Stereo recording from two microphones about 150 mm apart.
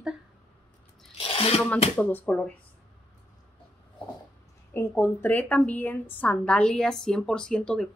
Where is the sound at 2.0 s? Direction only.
10° left (ahead or behind).